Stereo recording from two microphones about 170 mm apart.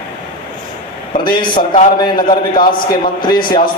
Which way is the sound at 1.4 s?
30° left (ahead or behind).